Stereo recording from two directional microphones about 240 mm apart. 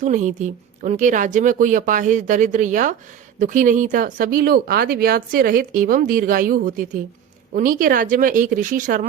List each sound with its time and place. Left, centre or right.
0.0 s speech: right